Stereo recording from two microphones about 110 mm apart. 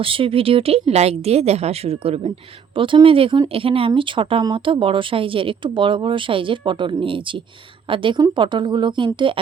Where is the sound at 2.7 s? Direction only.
50° right (ahead or behind).